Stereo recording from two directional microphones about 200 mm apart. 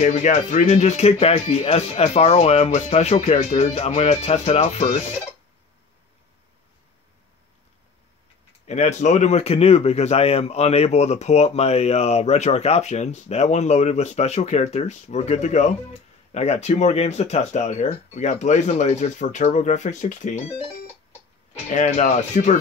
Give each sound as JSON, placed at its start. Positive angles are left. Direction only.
{"t": 0.0, "sound": "speech", "side_deg": 35}
{"t": 8.6, "sound": "speech", "side_deg": 35}
{"t": 21.6, "sound": "speech", "side_deg": 35}